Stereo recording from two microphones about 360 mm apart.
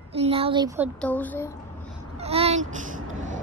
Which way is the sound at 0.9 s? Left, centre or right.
Centre.